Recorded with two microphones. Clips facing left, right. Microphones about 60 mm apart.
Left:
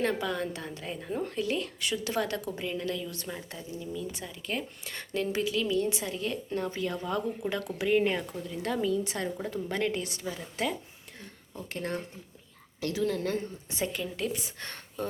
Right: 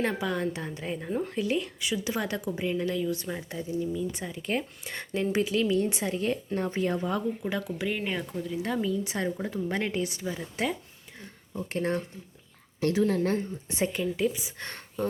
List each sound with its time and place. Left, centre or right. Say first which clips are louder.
0.0 s a woman's voice: right 1 dB; centre
4.1 s speech: right 4 dB; right
7.0 s a woman's voice: right 2 dB; centre
7.8 s a woman's voice: left 4 dB; centre
9.0 s speech: right 3 dB; right
14.6 s speech: right 3 dB; right